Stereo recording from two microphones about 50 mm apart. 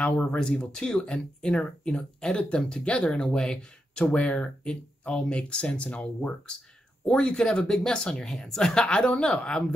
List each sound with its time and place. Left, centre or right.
0.1 s speech: left
0.4 s speech: centre